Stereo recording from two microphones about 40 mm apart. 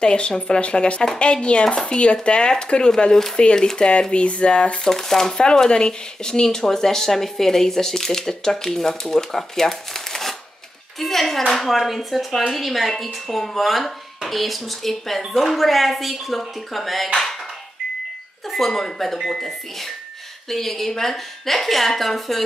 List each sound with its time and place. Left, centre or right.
0.0 s speech: left
4.8 s speech: centre
18.5 s speech: centre